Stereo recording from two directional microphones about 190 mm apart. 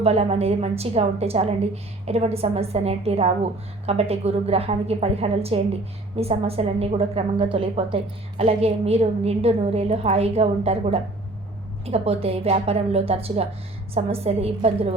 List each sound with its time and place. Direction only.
0.0 s a woman's voice: 30° right (ahead or behind)